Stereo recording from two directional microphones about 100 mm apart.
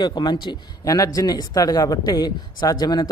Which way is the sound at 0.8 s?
35° left (ahead or behind).